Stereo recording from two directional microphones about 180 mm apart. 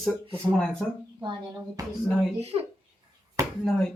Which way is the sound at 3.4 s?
15° right (ahead or behind).